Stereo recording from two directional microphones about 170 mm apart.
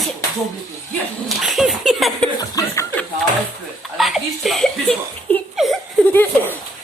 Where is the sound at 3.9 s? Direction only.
Centre (ahead or behind).